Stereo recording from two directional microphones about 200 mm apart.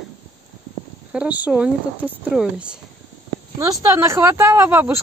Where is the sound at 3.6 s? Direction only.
20° right (ahead or behind).